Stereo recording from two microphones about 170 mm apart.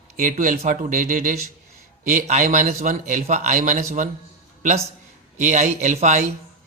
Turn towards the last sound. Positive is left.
turn(degrees=-45)  # may be behind; listen again after turning